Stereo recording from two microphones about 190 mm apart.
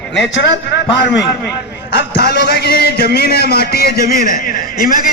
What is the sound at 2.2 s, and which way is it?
A man's voice, 60° left (ahead or behind).